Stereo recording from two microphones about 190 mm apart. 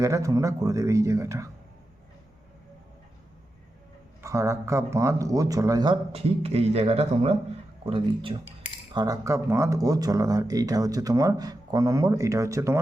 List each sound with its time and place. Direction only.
0.0 s speech: 15° right (ahead or behind)
4.2 s speech: 15° right (ahead or behind)